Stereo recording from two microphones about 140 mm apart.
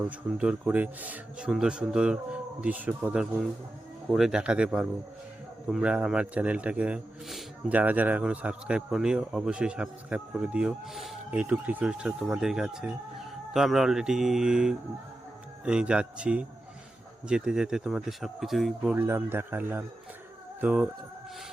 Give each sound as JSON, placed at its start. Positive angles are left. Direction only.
{"t": 0.0, "sound": "speech", "side_deg": -5}
{"t": 18.9, "sound": "speech", "side_deg": -15}